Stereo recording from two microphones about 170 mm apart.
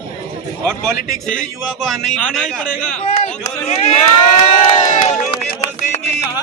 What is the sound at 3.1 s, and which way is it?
Speech, 40° left (ahead or behind).